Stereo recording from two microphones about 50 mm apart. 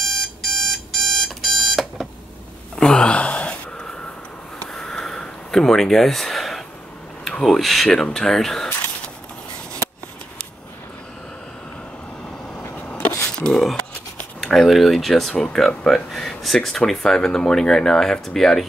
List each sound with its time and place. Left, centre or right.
0.0 s alarm clock: centre
2.7 s gasp: centre
3.2 s a sound: left
4.6 s sniff: centre
7.4 s speech: centre
12.7 s sneeze: left
13.5 s a sound: centre
14.4 s speech: centre